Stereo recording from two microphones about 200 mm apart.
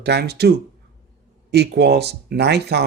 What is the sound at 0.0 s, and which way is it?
Speech, 55° right (ahead or behind).